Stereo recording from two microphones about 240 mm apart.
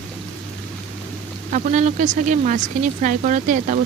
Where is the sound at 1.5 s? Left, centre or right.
Right.